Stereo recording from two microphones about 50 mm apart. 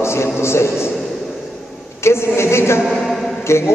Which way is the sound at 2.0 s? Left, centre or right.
Left.